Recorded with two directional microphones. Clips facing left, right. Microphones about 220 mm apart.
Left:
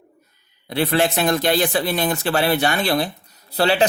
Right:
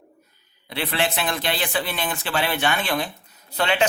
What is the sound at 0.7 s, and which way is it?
Speech, 45° left (ahead or behind).